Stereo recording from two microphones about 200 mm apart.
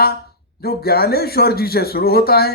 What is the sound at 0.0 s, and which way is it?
Speech, 50° left (ahead or behind).